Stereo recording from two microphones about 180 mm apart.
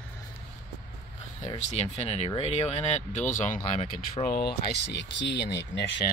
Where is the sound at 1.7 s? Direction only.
40° left (ahead or behind); by 4.5 s 55° left (ahead or behind).